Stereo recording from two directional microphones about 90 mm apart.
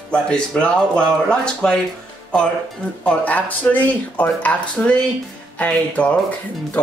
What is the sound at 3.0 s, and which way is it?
Speech, 15° left (ahead or behind).